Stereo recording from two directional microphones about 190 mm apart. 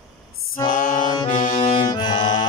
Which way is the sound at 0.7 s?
45° left (ahead or behind).